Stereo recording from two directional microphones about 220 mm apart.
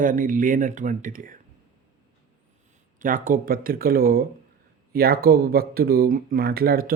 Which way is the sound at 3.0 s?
40° right (ahead or behind).